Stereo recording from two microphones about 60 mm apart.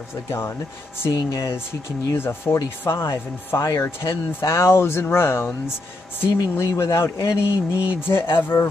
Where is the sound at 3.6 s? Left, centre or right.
Left.